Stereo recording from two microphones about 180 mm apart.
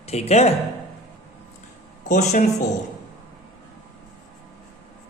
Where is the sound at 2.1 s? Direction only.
40° left (ahead or behind).